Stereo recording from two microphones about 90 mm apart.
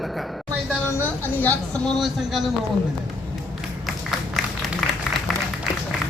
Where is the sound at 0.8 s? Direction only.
25° left (ahead or behind).